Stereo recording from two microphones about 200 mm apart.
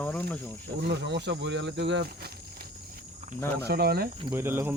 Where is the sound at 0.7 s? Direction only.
55° right (ahead or behind).